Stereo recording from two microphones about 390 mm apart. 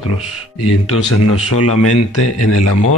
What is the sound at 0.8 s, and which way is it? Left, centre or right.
Speech, left.